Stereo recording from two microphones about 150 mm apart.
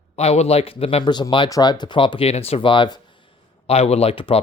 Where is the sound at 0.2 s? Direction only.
45° left (ahead or behind).